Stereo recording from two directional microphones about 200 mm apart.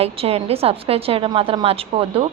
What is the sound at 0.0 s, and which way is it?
A woman's voice, 30° right (ahead or behind).